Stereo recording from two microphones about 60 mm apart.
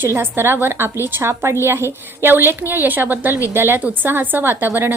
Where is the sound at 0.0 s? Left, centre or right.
Right.